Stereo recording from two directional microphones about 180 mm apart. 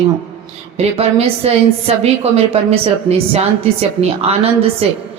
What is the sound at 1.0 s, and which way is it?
A woman's voice, 35° right (ahead or behind).